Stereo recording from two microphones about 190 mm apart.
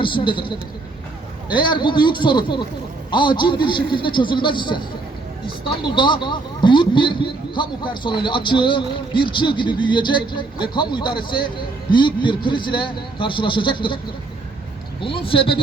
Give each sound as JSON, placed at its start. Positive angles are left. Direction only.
{"t": 0.0, "sound": "speech", "side_deg": 25}
{"t": 15.0, "sound": "speech", "side_deg": 30}